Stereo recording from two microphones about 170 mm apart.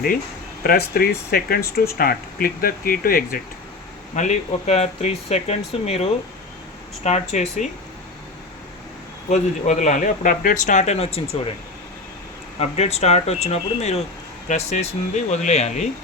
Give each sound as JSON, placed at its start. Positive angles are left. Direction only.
{"t": 0.6, "sound": "speech", "side_deg": 60}
{"t": 4.1, "sound": "speech", "side_deg": 45}
{"t": 9.3, "sound": "speech", "side_deg": 45}
{"t": 12.5, "sound": "speech", "side_deg": 40}